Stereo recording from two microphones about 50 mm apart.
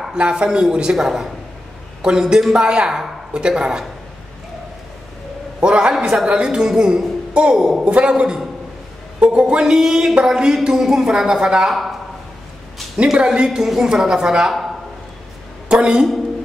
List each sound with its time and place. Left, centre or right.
0.1 s music: centre
5.6 s music: centre
7.8 s a man's voice: right
9.2 s music: centre
12.9 s music: centre
15.7 s music: centre